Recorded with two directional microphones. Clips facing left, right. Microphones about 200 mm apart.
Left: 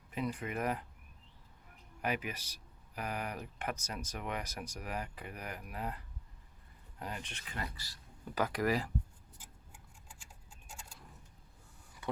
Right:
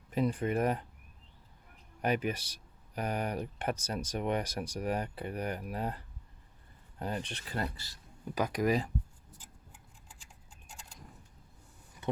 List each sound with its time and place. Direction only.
0.1 s speech: 35° right (ahead or behind)
2.0 s speech: 35° right (ahead or behind)
7.0 s speech: 35° right (ahead or behind)
8.4 s speech: 15° right (ahead or behind)
12.0 s a sound: 25° right (ahead or behind)